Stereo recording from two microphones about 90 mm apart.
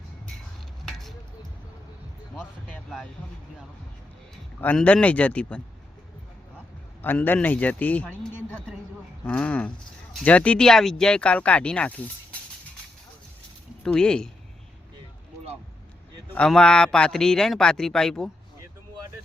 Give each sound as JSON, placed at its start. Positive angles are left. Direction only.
{"t": 0.9, "sound": "a sound", "side_deg": 5}
{"t": 4.6, "sound": "a man's voice", "side_deg": 15}
{"t": 7.0, "sound": "a man's voice", "side_deg": 20}
{"t": 9.2, "sound": "a man's voice", "side_deg": 15}
{"t": 13.8, "sound": "a man's voice", "side_deg": 10}
{"t": 16.5, "sound": "a man's voice", "side_deg": 10}